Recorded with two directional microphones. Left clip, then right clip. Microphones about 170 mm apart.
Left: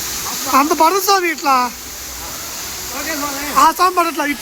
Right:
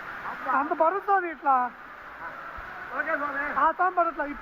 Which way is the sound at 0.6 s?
25° left (ahead or behind).